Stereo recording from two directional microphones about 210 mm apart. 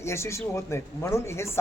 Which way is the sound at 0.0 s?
10° left (ahead or behind).